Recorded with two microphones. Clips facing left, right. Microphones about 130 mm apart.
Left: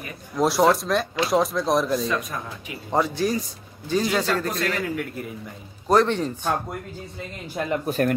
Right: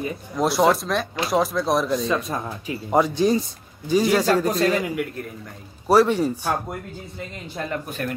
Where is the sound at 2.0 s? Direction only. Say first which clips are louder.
Right 3 dB; 30° right (ahead or behind).